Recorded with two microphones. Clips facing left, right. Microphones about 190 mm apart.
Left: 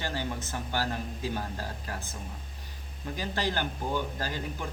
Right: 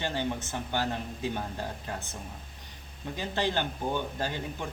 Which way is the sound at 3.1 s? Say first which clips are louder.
Right 2 dB; 20° right (ahead or behind).